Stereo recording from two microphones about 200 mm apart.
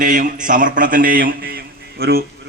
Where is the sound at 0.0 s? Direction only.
40° right (ahead or behind).